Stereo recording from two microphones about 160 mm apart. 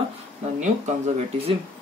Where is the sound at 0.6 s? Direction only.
45° right (ahead or behind).